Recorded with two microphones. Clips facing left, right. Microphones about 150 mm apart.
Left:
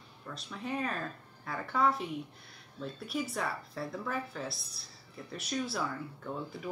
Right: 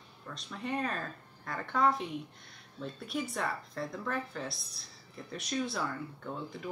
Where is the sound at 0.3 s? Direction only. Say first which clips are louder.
Right 1 dB; 5° left (ahead or behind).